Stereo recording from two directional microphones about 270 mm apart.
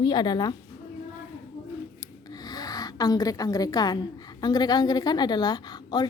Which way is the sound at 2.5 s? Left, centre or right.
Centre.